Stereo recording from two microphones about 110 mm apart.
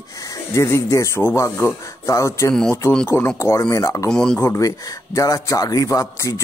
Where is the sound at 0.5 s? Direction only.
25° left (ahead or behind).